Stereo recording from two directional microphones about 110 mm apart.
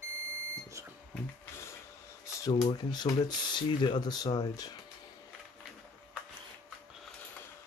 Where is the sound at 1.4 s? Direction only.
25° left (ahead or behind).